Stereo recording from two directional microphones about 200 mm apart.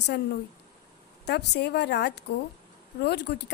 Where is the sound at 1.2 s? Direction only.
55° left (ahead or behind).